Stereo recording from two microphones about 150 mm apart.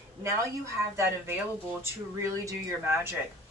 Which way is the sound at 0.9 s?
15° right (ahead or behind).